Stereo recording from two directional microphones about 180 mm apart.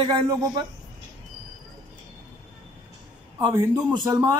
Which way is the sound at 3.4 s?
20° right (ahead or behind).